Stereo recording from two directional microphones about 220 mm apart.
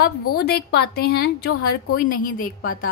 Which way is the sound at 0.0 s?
45° left (ahead or behind).